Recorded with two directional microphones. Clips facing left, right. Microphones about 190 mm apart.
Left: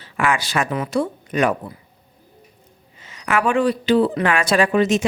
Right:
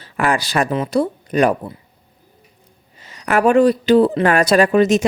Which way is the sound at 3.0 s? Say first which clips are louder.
Right 5 dB; 40° right (ahead or behind).